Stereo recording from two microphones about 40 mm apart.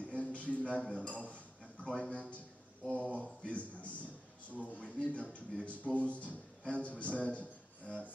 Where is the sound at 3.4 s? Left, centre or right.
Left.